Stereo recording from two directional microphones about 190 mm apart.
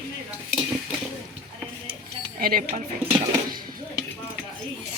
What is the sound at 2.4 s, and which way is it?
Speech, 50° right (ahead or behind).